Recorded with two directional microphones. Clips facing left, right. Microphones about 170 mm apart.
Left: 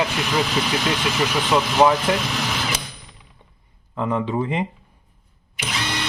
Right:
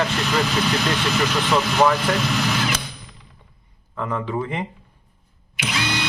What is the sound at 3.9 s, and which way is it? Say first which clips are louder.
Speech: left 3 dB; 20° left (ahead or behind).